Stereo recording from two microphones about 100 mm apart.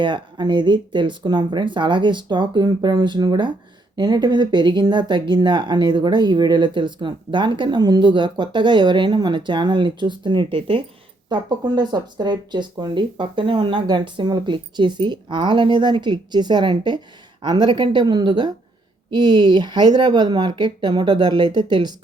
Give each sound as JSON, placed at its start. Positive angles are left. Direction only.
{"t": 0.0, "sound": "speech", "side_deg": -50}
{"t": 10.5, "sound": "speech", "side_deg": -65}
{"t": 11.3, "sound": "speech", "side_deg": -45}